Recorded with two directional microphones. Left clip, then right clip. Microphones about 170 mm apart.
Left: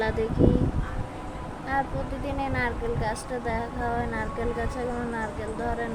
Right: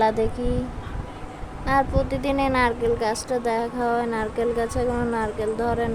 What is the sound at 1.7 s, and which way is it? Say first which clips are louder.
Speech: right 7 dB; 70° right (ahead or behind).